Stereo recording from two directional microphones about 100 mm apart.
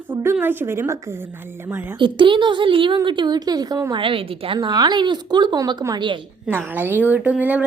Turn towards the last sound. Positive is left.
turn(degrees=-15)  # may be behind; listen again after turning